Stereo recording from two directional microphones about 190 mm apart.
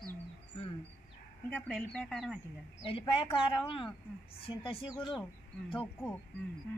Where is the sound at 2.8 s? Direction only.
30° left (ahead or behind).